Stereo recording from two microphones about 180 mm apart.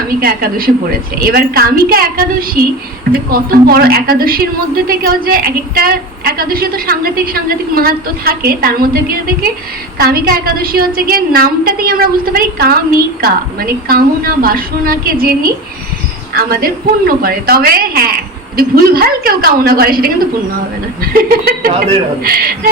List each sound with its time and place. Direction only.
0.2 s a woman's voice: 55° right (ahead or behind)